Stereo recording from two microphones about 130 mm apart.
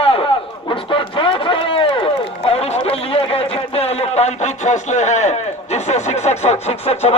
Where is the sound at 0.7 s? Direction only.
40° left (ahead or behind).